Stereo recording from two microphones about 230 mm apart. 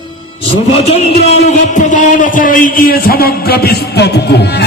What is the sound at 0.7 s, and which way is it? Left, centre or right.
Speech, left.